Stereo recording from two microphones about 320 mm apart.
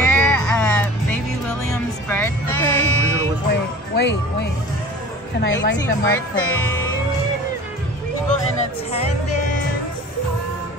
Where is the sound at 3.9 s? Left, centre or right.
Left.